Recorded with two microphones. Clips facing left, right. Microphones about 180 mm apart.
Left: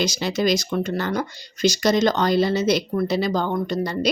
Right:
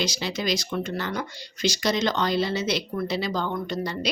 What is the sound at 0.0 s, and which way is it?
Speech, 45° left (ahead or behind).